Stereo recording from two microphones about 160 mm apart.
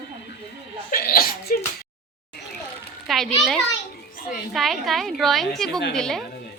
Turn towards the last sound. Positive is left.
turn(degrees=5)  # may be behind; listen again after turning